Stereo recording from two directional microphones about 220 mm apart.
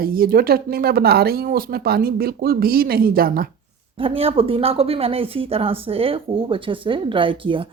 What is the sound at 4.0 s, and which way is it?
Speech, 25° right (ahead or behind).